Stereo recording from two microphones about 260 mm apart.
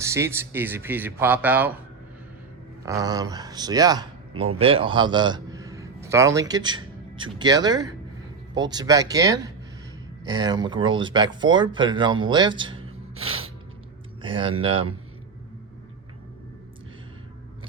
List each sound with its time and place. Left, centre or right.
0.0 s speech: centre
2.8 s a man's voice: centre
13.1 s snort: right
14.2 s a man's voice: centre